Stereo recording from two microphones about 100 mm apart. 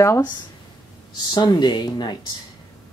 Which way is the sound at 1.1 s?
45° left (ahead or behind).